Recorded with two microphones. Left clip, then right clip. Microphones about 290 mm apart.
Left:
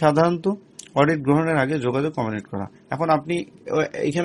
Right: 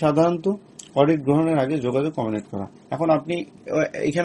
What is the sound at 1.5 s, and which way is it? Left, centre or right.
A man's voice, left.